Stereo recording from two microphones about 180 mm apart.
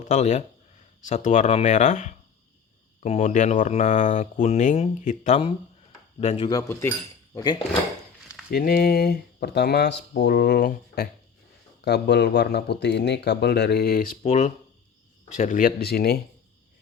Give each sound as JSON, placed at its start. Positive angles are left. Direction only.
{"t": 0.0, "sound": "speech", "side_deg": 40}
{"t": 6.5, "sound": "speech", "side_deg": 20}
{"t": 8.4, "sound": "speech", "side_deg": 55}
{"t": 11.8, "sound": "speech", "side_deg": 70}
{"t": 14.2, "sound": "speech", "side_deg": 40}